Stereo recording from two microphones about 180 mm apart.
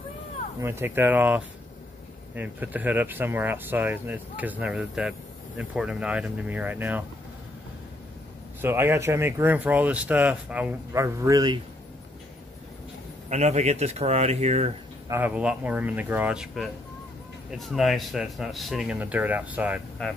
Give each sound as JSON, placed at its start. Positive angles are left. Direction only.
{"t": 0.6, "sound": "speech", "side_deg": -15}
{"t": 8.5, "sound": "speech", "side_deg": -10}
{"t": 13.3, "sound": "speech", "side_deg": -40}
{"t": 15.0, "sound": "speech", "side_deg": -10}